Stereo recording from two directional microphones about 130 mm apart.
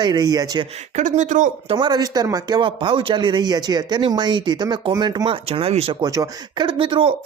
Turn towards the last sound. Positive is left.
turn(degrees=-40)  # may be behind; listen again after turning